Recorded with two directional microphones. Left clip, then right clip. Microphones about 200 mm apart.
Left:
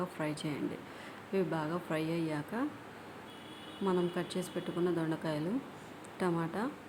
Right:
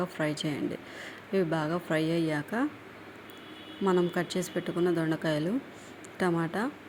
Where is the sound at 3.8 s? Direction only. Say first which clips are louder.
Right 6 dB; 20° right (ahead or behind).